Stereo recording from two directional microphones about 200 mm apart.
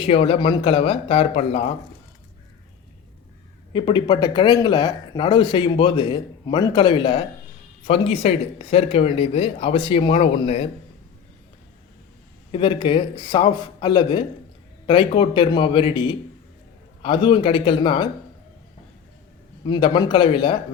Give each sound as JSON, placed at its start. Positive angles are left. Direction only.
{"t": 0.0, "sound": "speech", "side_deg": 30}
{"t": 3.7, "sound": "speech", "side_deg": 25}
{"t": 12.5, "sound": "speech", "side_deg": 25}
{"t": 19.6, "sound": "speech", "side_deg": 25}